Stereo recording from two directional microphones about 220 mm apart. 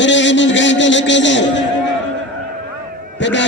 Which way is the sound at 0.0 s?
55° left (ahead or behind).